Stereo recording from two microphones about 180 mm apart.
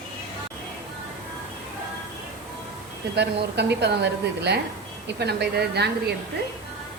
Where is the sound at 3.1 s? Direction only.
65° right (ahead or behind).